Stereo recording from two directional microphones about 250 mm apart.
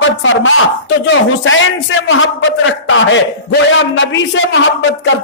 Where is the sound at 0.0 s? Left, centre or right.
Left.